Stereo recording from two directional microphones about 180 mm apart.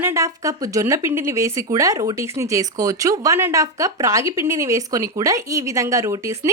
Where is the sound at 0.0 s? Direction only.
15° right (ahead or behind).